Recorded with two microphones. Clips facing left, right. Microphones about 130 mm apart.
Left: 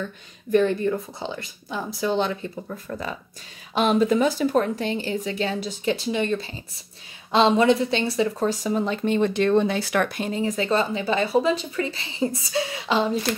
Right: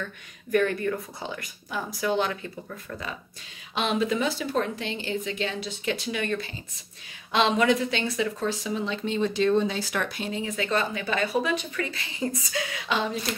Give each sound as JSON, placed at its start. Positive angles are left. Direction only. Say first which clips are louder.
{"t": 0.0, "sound": "speech", "louder": "left 4 dB", "side_deg": 25}